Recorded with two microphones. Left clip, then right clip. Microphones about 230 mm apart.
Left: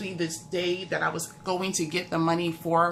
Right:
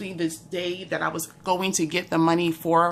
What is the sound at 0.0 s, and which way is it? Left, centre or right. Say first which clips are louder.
Speech: right 3 dB; right.